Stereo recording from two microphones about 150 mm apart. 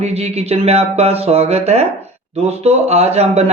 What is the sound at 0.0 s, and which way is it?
Speech, 45° right (ahead or behind).